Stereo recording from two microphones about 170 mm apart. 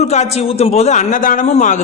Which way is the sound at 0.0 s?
40° left (ahead or behind).